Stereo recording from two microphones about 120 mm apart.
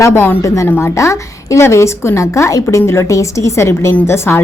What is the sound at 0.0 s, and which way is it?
A woman's voice, 20° left (ahead or behind).